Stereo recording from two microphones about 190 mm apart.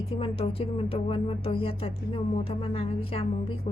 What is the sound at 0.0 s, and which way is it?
Speech, 30° left (ahead or behind).